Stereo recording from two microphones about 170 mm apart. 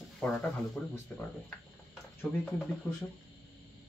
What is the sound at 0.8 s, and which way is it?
Speech, 10° left (ahead or behind).